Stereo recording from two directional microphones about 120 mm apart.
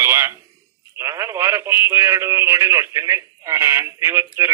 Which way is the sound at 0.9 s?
25° right (ahead or behind).